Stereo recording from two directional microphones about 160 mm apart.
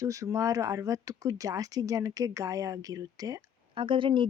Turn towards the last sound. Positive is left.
turn(degrees=-30)  # may be behind; listen again after turning